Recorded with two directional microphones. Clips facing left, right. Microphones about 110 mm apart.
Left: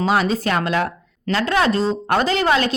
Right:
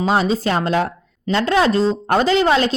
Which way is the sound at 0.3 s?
30° right (ahead or behind).